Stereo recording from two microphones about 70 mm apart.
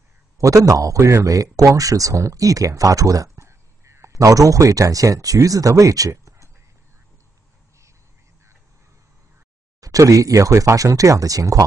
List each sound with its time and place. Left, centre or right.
0.4 s speech: right
9.8 s speech: right